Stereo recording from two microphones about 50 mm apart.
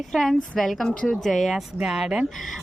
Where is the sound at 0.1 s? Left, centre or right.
Centre.